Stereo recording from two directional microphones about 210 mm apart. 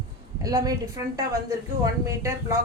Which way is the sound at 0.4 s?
15° right (ahead or behind).